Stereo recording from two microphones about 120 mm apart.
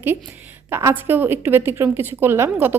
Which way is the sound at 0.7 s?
20° right (ahead or behind).